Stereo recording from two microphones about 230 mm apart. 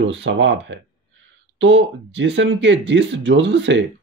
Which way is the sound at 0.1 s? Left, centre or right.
Right.